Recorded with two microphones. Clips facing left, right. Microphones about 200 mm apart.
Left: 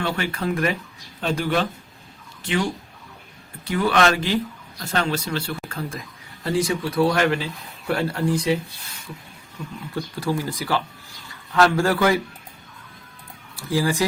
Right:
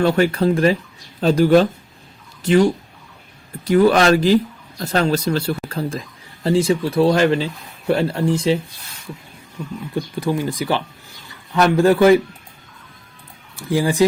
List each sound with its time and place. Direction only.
0.0 s speech: 40° right (ahead or behind)
3.7 s speech: 40° right (ahead or behind); by 8.5 s 25° right (ahead or behind)
9.9 s speech: 20° right (ahead or behind)
13.6 s speech: 20° right (ahead or behind)